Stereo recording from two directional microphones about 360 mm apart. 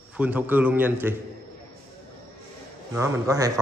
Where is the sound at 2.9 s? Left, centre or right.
Centre.